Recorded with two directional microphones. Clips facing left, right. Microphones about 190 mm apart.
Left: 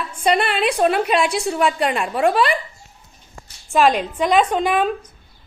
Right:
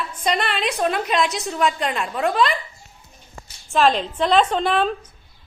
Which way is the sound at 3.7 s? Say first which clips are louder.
Left 2 dB; 15° left (ahead or behind).